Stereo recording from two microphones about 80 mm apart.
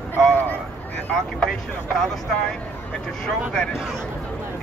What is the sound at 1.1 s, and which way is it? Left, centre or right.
Speech, centre.